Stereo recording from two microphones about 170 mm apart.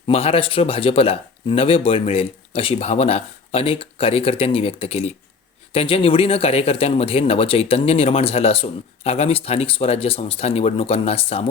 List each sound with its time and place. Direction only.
0.1 s speech: 35° left (ahead or behind)